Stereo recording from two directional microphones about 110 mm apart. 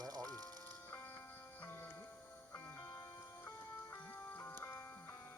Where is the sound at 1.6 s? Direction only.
20° left (ahead or behind).